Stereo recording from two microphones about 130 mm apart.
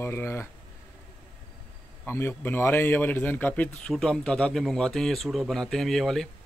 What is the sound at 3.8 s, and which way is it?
Speech, 5° left (ahead or behind).